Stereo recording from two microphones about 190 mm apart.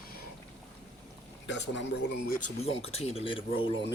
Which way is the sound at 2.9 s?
30° left (ahead or behind).